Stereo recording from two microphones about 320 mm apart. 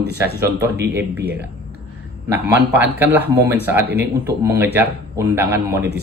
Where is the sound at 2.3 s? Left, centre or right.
Centre.